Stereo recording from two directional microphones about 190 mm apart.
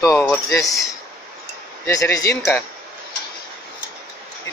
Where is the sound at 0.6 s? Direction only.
15° left (ahead or behind).